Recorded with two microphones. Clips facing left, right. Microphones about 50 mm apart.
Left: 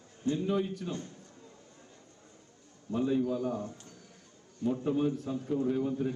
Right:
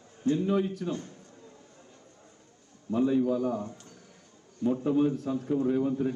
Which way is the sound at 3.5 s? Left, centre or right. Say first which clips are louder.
Right 3 dB; right.